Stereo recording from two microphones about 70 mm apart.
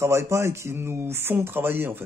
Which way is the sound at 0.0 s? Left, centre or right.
Right.